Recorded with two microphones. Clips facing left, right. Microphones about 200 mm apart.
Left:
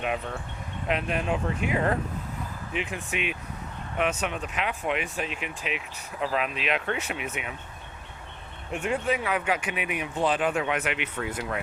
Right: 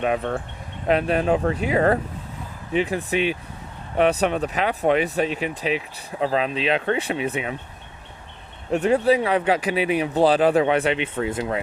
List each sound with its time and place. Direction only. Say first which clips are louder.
0.2 s speech: right 9 dB; 55° right (ahead or behind)
0.9 s speech: right 8 dB; 35° right (ahead or behind)
2.7 s speech: right 10 dB; 35° right (ahead or behind)
8.7 s speech: right 9 dB; 35° right (ahead or behind)